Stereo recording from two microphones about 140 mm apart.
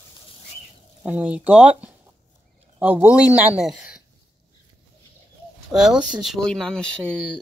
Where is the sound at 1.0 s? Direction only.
10° right (ahead or behind).